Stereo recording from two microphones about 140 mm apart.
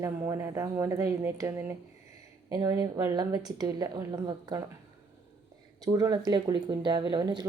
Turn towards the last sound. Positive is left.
turn(degrees=-30)  # may be behind; listen again after turning